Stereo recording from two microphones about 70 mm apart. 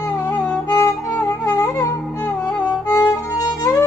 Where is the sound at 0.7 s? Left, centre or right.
Left.